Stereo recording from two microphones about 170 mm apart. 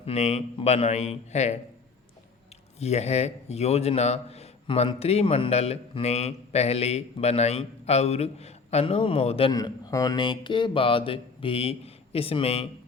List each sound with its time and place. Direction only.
0.0 s a man's voice: 35° left (ahead or behind)
2.7 s a man's voice: 40° left (ahead or behind)
9.5 s a man's voice: 20° left (ahead or behind)